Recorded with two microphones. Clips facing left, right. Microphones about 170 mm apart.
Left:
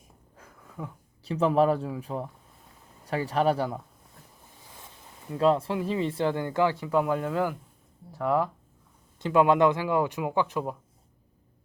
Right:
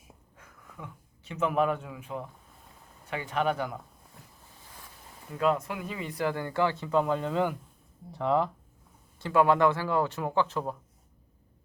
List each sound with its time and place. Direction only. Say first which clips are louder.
0.3 s speech: left 7 dB; 35° left (ahead or behind)
5.3 s speech: left 4 dB; 30° left (ahead or behind); by 8.4 s 5° left (ahead or behind)
9.1 s speech: left 2 dB; 20° left (ahead or behind)